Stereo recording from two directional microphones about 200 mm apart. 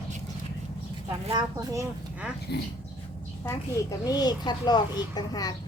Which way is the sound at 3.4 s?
20° left (ahead or behind).